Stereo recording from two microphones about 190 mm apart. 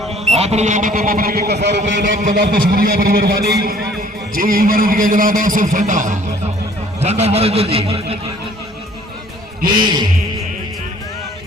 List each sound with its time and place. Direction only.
0.1 s speech: 35° right (ahead or behind); by 1.8 s 65° right (ahead or behind)
2.0 s a man's voice: 45° right (ahead or behind)
9.6 s a man's voice: 25° right (ahead or behind)